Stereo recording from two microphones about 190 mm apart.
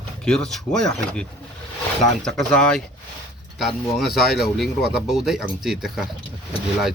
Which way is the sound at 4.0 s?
Centre (ahead or behind).